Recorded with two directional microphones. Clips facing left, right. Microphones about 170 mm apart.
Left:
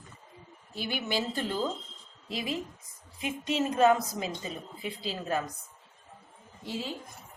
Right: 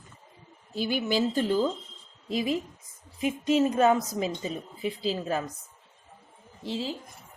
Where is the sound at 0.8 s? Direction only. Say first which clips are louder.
Right 6 dB; 40° right (ahead or behind).